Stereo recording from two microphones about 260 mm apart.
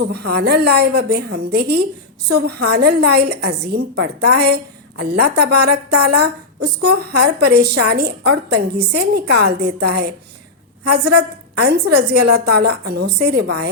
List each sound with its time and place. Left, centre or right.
0.0 s a woman's voice: right